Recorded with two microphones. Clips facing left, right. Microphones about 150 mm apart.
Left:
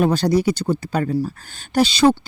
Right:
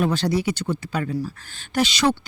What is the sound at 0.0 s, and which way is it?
A child's voice, 40° left (ahead or behind).